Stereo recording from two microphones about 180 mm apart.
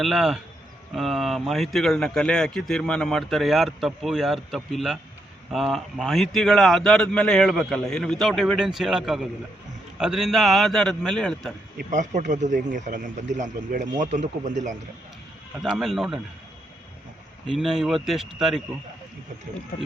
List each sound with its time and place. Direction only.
0.0 s speech: centre (ahead or behind)
11.8 s a man's voice: 45° right (ahead or behind)
15.6 s speech: centre (ahead or behind)
17.4 s speech: centre (ahead or behind)